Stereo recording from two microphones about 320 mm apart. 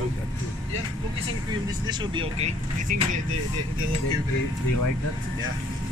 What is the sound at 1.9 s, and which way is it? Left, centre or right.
Speech, centre.